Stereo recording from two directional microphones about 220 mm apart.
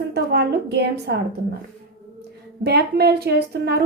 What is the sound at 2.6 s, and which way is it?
A woman's voice, 45° right (ahead or behind).